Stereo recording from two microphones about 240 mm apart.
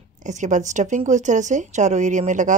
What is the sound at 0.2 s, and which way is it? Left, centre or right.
Speech, right.